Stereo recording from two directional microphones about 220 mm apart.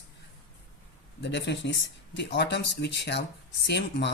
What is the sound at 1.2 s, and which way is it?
Speech, 50° left (ahead or behind).